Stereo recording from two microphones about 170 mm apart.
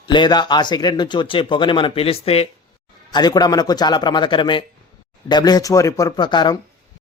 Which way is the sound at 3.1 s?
25° left (ahead or behind).